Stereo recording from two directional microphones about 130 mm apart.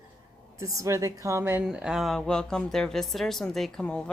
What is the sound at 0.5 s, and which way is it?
A woman's voice, 25° right (ahead or behind).